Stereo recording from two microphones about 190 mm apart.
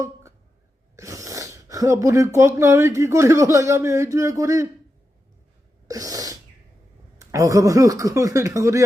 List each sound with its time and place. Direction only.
0.0 s a sound: 15° right (ahead or behind)
0.9 s speech: 15° right (ahead or behind)
5.9 s sneeze: 20° right (ahead or behind)
7.2 s speech: 15° right (ahead or behind)